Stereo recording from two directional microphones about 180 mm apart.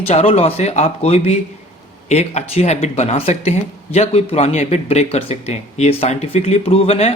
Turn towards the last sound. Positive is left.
turn(degrees=35)  # may be behind; listen again after turning